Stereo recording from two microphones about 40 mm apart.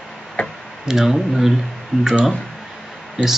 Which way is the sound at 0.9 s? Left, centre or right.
Centre.